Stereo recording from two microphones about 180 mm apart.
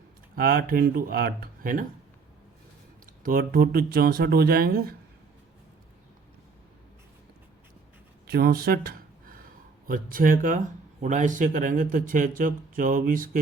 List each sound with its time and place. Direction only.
0.3 s speech: 55° right (ahead or behind)
3.2 s speech: 50° right (ahead or behind)
8.3 s a sound: 60° right (ahead or behind)
9.8 s speech: 50° right (ahead or behind)